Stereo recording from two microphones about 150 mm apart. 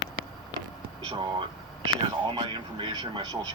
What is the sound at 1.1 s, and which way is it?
Speech, 35° right (ahead or behind).